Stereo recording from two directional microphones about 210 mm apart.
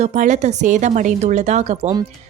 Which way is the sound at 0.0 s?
35° right (ahead or behind).